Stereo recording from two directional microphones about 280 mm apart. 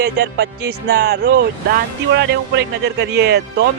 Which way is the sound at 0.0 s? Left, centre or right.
Right.